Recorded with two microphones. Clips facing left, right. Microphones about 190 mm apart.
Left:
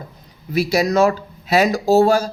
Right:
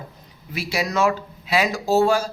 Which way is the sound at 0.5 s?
40° left (ahead or behind).